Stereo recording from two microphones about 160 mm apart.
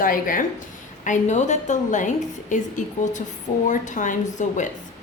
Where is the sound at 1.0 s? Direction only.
50° left (ahead or behind).